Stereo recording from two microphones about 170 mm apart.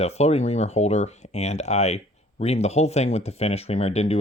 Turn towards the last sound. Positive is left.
turn(degrees=40)  # may be behind; listen again after turning